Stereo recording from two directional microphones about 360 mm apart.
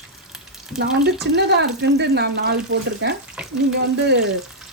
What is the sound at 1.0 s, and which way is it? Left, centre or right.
Speech, right.